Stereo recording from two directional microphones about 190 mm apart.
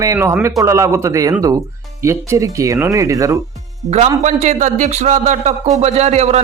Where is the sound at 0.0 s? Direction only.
15° right (ahead or behind).